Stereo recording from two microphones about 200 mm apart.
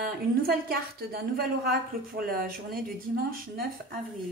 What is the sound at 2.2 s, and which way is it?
Speech, 45° right (ahead or behind).